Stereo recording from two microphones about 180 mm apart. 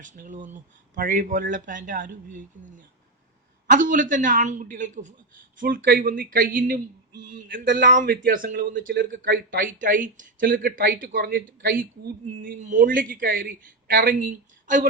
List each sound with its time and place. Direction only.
0.0 s speech: 45° right (ahead or behind)
8.7 s speech: 80° right; by 14.8 s 50° right (ahead or behind)